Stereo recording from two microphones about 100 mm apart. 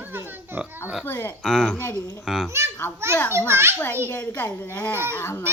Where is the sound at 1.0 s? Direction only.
20° left (ahead or behind).